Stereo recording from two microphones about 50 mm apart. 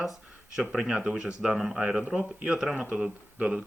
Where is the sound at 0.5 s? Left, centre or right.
Centre.